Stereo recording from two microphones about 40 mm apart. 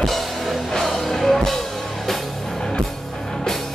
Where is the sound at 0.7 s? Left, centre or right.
Centre.